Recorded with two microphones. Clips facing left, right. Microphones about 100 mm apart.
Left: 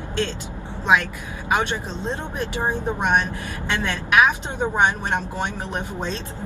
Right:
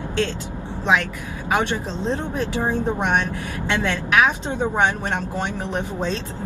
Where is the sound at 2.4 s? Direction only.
15° left (ahead or behind).